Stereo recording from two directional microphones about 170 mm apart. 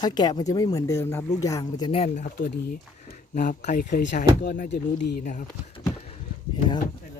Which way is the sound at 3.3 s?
50° left (ahead or behind).